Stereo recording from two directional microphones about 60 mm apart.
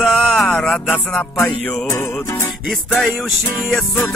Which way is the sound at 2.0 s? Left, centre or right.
Left.